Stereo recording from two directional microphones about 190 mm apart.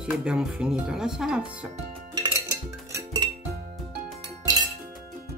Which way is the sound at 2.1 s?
15° right (ahead or behind).